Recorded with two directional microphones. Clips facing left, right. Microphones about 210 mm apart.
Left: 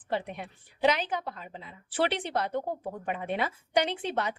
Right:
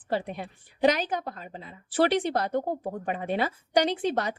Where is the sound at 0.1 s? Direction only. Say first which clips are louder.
Right 3 dB; 35° right (ahead or behind).